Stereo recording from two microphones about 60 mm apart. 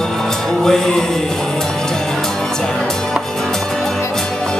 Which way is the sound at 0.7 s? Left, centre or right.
Centre.